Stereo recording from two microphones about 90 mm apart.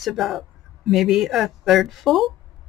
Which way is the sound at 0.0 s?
Centre (ahead or behind).